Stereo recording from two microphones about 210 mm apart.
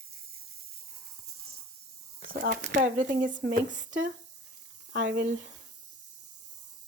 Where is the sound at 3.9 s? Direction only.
65° right (ahead or behind).